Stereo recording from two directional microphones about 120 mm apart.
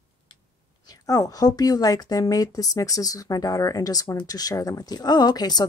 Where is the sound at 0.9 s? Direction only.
30° left (ahead or behind).